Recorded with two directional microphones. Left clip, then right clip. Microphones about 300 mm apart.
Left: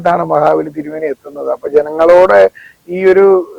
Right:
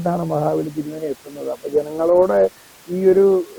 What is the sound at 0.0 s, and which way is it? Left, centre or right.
A man's voice, centre.